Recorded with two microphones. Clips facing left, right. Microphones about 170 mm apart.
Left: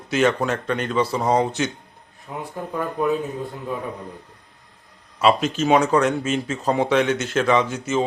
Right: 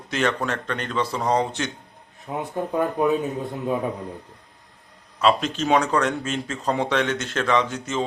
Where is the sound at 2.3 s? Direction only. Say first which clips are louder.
Right 3 dB; 25° right (ahead or behind).